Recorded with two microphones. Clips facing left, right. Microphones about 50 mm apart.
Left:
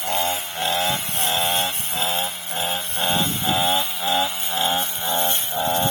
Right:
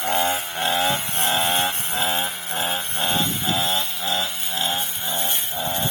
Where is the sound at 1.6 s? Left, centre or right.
Centre.